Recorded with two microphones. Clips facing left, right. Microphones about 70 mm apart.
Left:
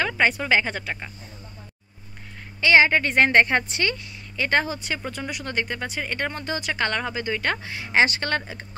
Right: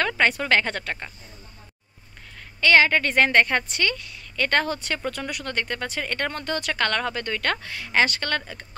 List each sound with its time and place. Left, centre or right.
0.0 s a woman's voice: centre
2.6 s a woman's voice: centre